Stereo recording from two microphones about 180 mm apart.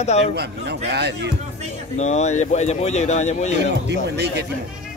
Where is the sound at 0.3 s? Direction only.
65° right (ahead or behind).